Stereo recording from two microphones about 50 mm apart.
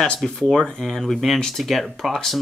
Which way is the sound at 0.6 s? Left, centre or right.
Centre.